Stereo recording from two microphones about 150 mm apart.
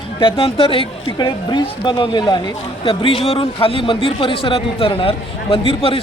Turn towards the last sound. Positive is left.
turn(degrees=40)  # may be behind; listen again after turning